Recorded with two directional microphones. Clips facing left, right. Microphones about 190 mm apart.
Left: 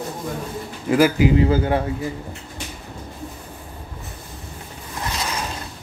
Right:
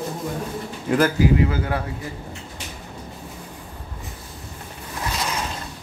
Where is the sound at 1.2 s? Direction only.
30° left (ahead or behind).